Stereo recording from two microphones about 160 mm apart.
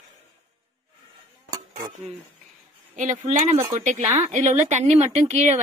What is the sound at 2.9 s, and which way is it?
Speech, 55° right (ahead or behind).